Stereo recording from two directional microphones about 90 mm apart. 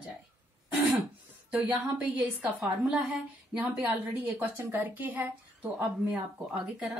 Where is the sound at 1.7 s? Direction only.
15° right (ahead or behind).